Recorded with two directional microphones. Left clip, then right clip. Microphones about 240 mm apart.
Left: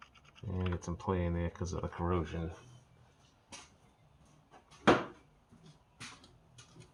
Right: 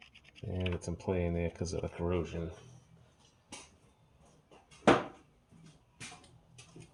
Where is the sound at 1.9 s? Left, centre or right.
Left.